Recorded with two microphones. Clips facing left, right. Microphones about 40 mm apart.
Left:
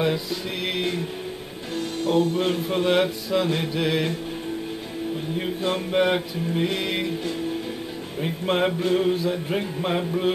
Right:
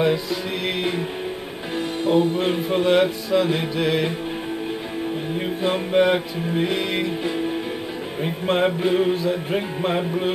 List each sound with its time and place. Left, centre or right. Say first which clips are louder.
0.0 s music: right 4 dB; centre
2.8 s music: right 3 dB; centre
5.6 s music: right 4 dB; centre
8.2 s music: right 2 dB; centre
8.7 s music: right 2 dB; centre